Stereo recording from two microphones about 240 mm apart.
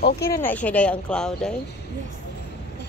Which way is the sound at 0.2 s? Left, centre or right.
Centre.